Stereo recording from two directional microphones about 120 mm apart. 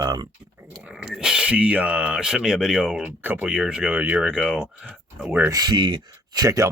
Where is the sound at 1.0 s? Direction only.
5° right (ahead or behind).